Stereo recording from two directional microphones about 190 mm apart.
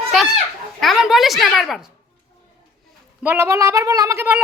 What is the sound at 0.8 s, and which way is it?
Speech, centre (ahead or behind).